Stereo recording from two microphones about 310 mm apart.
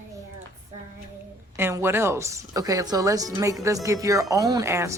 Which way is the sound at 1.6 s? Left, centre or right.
Centre.